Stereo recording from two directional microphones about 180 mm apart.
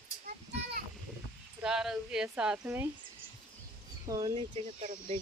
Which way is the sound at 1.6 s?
5° right (ahead or behind).